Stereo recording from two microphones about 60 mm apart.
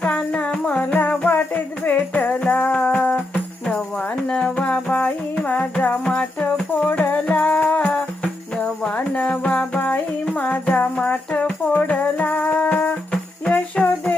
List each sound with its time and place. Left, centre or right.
0.5 s music: centre
7.9 s music: centre
13.7 s music: centre